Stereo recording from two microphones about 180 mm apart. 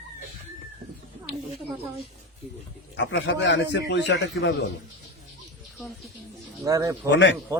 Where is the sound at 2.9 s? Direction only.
85° left.